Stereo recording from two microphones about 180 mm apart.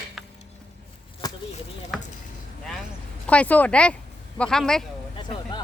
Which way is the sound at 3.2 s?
5° left (ahead or behind).